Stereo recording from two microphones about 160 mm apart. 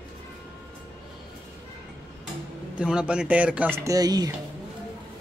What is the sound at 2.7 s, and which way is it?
Speech, 5° right (ahead or behind).